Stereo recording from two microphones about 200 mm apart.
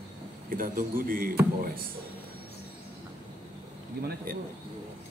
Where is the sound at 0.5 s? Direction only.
45° right (ahead or behind).